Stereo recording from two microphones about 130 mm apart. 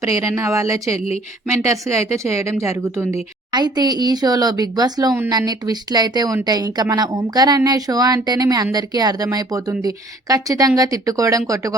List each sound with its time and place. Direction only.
0.0 s a woman's voice: 25° right (ahead or behind)
3.5 s a woman's voice: 30° right (ahead or behind)